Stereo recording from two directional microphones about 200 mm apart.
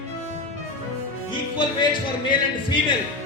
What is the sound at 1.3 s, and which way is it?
Music, 25° left (ahead or behind).